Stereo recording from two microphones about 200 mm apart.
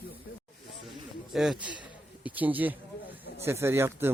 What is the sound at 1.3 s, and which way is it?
Speech, centre (ahead or behind).